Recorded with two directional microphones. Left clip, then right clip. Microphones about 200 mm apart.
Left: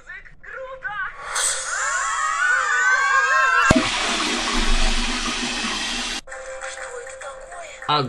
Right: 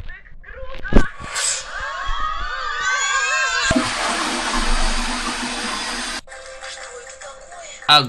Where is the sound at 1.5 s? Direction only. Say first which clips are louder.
Left 2 dB; 50° left (ahead or behind).